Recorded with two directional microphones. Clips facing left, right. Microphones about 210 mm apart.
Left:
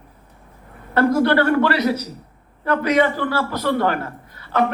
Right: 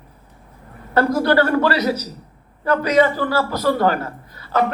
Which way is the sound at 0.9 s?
40° right (ahead or behind).